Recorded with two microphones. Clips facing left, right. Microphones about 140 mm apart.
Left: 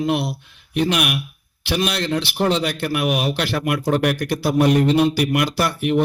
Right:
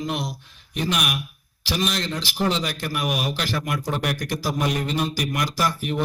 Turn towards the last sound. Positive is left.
turn(degrees=65)  # may be behind; listen again after turning